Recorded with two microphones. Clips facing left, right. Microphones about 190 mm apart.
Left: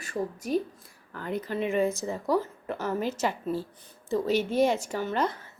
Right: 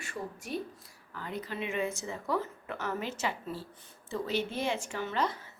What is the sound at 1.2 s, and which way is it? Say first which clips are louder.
Speech: left 7 dB; 50° left (ahead or behind).